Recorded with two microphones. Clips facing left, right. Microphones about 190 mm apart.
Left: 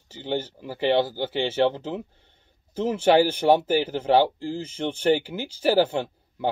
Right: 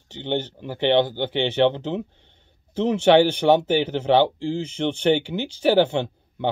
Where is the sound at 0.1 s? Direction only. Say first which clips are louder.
Right 2 dB; 5° left (ahead or behind).